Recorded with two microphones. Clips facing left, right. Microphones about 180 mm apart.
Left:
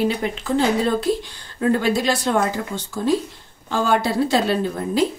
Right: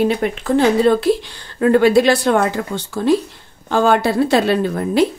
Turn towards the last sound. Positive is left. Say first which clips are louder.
# right 4 dB
turn(degrees=-70)  # may be behind; listen again after turning